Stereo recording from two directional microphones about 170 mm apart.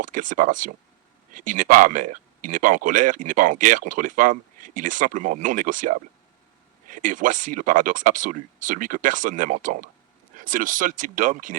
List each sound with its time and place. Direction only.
0.0 s speech: 50° right (ahead or behind)